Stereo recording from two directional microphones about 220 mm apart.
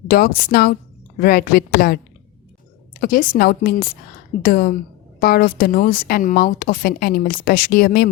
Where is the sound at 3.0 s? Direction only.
40° left (ahead or behind).